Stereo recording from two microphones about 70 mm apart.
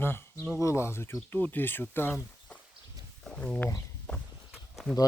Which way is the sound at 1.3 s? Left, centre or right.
Left.